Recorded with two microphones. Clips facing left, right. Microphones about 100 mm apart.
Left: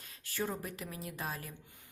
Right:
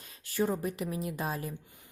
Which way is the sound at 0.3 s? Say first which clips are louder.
Right 8 dB; 20° right (ahead or behind).